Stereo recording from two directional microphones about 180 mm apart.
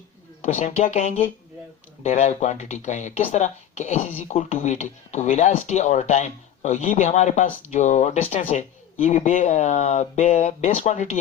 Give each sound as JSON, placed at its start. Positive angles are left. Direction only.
{"t": 0.4, "sound": "speech", "side_deg": 40}